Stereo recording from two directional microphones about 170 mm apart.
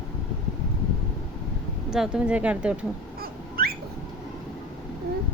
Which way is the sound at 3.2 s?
60° right (ahead or behind).